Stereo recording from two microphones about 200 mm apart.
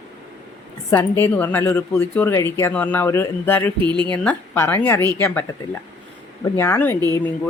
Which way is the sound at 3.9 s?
25° right (ahead or behind).